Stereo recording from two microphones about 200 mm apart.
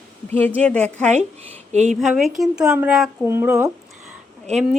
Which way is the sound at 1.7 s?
35° right (ahead or behind).